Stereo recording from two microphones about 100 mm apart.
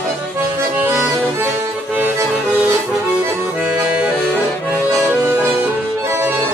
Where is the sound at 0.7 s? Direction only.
25° right (ahead or behind).